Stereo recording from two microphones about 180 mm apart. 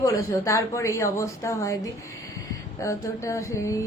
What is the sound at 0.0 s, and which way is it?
A man's voice, 20° left (ahead or behind).